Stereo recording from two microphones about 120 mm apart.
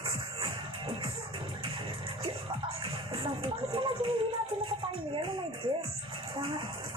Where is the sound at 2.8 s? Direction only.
45° right (ahead or behind).